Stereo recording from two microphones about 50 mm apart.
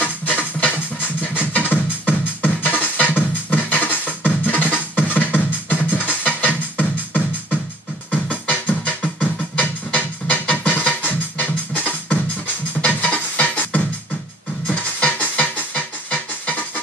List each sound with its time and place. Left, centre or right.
0.0 s music: left